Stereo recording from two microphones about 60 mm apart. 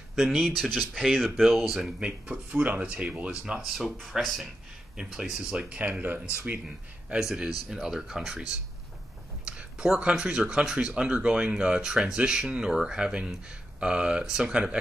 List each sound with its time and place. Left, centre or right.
0.1 s speech: centre
1.7 s speech: centre
3.6 s speech: centre; by 6.6 s right
7.2 s speech: centre
9.5 s speech: centre